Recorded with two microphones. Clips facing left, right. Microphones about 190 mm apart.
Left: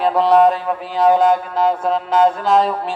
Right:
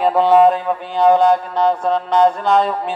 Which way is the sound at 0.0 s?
Centre (ahead or behind).